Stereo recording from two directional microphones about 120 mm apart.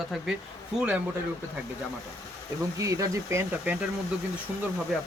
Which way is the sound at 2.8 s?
25° right (ahead or behind).